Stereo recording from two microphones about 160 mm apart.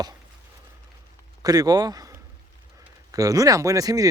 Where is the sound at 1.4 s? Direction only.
25° right (ahead or behind).